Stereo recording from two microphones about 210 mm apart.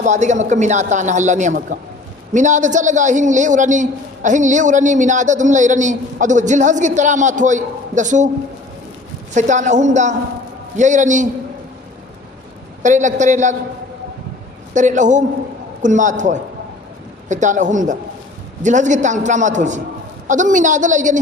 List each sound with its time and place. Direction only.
0.0 s a man's voice: 35° right (ahead or behind)
9.3 s a man's voice: 35° right (ahead or behind)
12.8 s a man's voice: 35° right (ahead or behind)
14.7 s a man's voice: 35° right (ahead or behind)